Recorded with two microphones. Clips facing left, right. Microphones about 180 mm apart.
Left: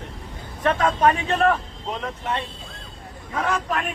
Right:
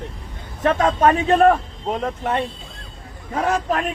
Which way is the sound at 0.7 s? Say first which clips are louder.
Right 3 dB; 45° right (ahead or behind).